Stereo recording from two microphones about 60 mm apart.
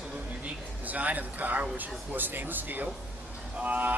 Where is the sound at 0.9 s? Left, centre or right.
Right.